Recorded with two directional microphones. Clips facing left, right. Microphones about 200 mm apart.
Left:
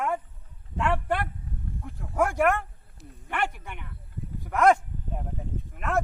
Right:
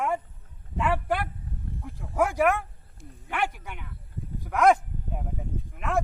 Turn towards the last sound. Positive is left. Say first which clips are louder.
# even
turn(degrees=0)  # may be behind; listen again after turning